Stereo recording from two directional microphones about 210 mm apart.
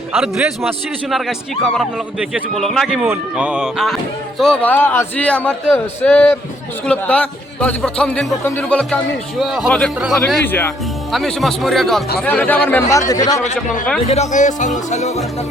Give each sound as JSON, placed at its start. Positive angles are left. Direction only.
{"t": 0.1, "sound": "a man's voice", "side_deg": 0}
{"t": 14.1, "sound": "speech", "side_deg": 35}